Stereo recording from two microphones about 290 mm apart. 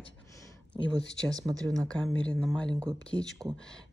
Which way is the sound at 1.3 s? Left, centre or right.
Centre.